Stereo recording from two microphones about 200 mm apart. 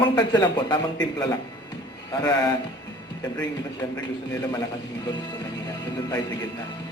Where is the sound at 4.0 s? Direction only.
15° left (ahead or behind).